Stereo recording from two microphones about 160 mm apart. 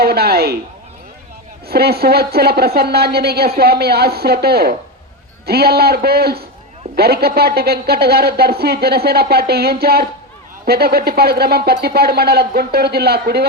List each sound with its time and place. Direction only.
0.0 s speech: 80° right
1.6 s speech: 80° right